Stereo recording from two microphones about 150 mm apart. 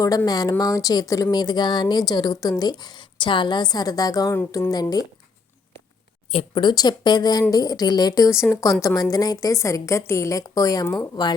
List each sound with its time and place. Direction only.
0.3 s speech: 25° left (ahead or behind)
4.4 s a woman's voice: 15° left (ahead or behind)
4.7 s speech: 25° left (ahead or behind)
6.3 s speech: 30° left (ahead or behind)